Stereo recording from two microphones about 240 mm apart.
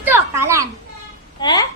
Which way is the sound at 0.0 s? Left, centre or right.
Centre.